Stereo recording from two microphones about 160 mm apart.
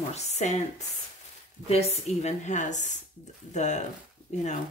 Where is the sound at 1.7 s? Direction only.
40° left (ahead or behind).